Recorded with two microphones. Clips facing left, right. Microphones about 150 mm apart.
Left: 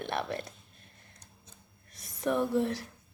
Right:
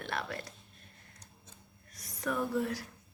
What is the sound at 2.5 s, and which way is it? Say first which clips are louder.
Speech: left 4 dB; 25° left (ahead or behind).